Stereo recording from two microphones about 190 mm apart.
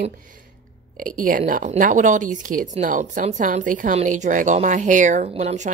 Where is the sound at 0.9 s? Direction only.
45° right (ahead or behind).